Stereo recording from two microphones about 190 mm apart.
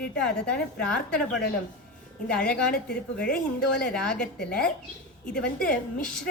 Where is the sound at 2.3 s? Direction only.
50° left (ahead or behind).